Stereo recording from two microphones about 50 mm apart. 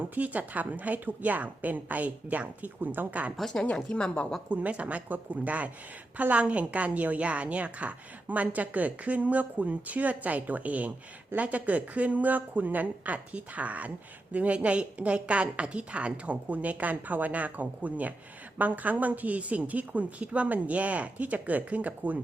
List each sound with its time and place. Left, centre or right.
0.1 s a woman's voice: right
3.9 s speech: centre
4.4 s a woman's voice: right